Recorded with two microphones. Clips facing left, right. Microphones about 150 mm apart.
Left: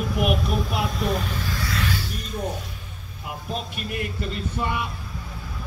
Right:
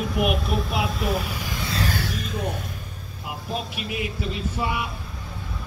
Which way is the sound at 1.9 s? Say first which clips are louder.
Right 4 dB; 90° right.